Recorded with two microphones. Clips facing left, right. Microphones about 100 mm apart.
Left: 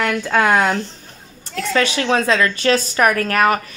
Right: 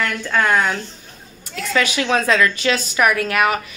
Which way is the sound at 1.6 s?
30° left (ahead or behind).